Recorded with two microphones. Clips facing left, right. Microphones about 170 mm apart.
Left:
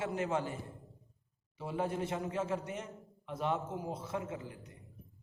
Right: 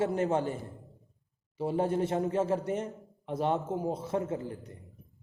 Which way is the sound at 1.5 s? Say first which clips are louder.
Right 7 dB; 35° right (ahead or behind).